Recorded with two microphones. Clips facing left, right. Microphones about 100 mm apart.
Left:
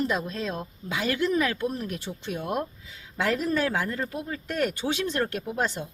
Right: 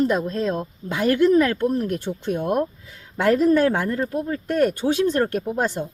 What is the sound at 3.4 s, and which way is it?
Speech, 55° right (ahead or behind).